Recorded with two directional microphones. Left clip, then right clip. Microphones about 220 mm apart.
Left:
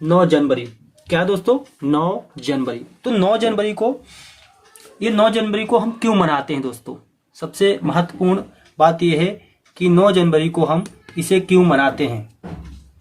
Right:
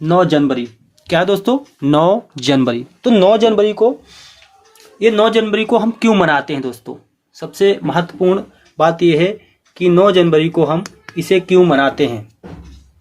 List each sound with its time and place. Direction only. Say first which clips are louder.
0.0 s speech: right 2 dB; 50° right (ahead or behind); by 3.9 s 15° right (ahead or behind)
4.9 s speech: right 4 dB; 30° right (ahead or behind)